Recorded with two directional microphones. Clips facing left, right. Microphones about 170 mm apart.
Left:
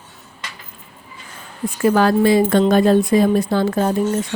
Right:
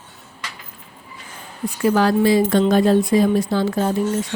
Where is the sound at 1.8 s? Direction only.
50° left (ahead or behind).